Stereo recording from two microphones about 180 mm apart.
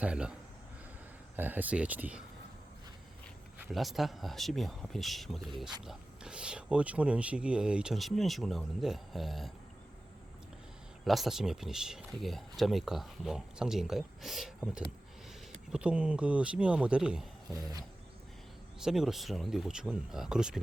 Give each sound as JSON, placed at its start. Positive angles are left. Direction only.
{"t": 0.0, "sound": "speech", "side_deg": -5}
{"t": 1.4, "sound": "speech", "side_deg": -10}
{"t": 3.6, "sound": "speech", "side_deg": 0}
{"t": 11.0, "sound": "speech", "side_deg": 0}
{"t": 17.5, "sound": "a sound", "side_deg": -20}
{"t": 18.8, "sound": "speech", "side_deg": -5}